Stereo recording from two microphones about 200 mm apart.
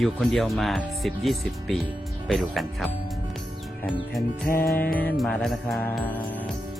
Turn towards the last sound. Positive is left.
turn(degrees=5)  # may be behind; listen again after turning